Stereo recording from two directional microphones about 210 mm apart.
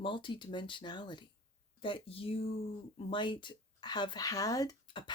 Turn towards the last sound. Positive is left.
turn(degrees=20)  # may be behind; listen again after turning